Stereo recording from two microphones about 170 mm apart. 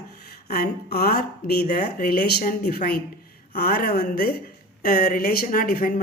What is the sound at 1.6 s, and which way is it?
Speech, 45° left (ahead or behind).